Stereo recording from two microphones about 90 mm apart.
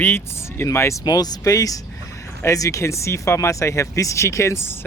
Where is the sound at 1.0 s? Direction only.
45° left (ahead or behind).